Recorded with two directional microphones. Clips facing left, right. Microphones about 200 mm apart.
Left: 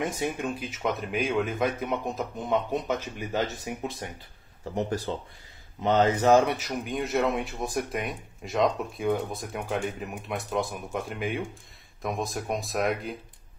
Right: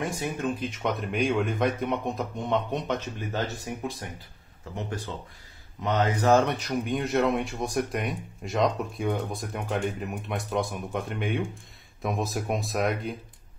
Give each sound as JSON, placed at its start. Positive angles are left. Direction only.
{"t": 0.0, "sound": "speech", "side_deg": 20}
{"t": 0.6, "sound": "speech", "side_deg": 5}
{"t": 4.7, "sound": "speech", "side_deg": 35}
{"t": 5.8, "sound": "speech", "side_deg": 25}
{"t": 6.3, "sound": "speech", "side_deg": 10}